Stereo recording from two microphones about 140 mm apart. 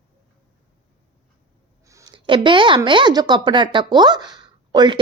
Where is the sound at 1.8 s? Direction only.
20° right (ahead or behind).